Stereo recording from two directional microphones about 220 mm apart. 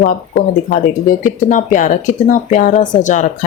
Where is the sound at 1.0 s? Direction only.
35° left (ahead or behind).